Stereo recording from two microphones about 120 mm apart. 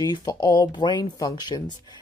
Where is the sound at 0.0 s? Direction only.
35° left (ahead or behind).